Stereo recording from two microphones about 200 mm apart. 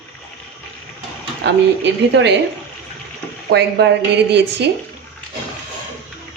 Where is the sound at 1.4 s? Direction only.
55° right (ahead or behind).